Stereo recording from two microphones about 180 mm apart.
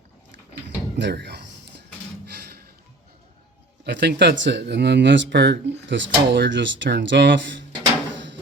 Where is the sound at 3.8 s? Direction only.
75° right (ahead or behind); by 7.6 s 90° right.